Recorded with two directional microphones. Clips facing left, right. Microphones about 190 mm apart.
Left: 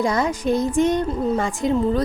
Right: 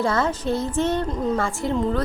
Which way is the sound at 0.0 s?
15° left (ahead or behind).